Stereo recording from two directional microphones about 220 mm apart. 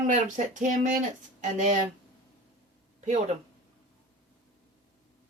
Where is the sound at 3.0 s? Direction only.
35° right (ahead or behind).